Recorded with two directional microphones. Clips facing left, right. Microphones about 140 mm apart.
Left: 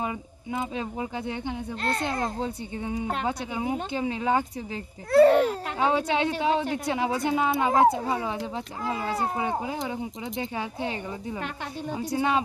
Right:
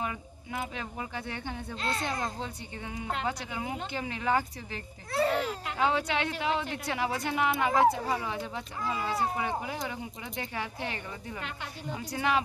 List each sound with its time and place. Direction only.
0.0 s a woman's voice: 25° left (ahead or behind)
1.8 s a child's voice: 50° left (ahead or behind)
3.3 s a woman's voice: 25° left (ahead or behind)
5.1 s a child's voice: 50° left (ahead or behind)
5.8 s a woman's voice: 30° left (ahead or behind)